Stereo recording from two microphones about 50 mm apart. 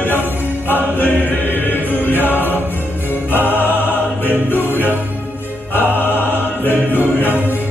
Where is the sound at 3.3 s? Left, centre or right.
Left.